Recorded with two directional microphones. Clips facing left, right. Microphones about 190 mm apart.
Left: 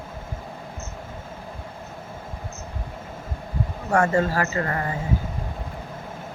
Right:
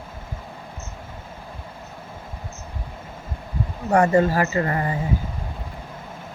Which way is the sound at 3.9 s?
20° right (ahead or behind).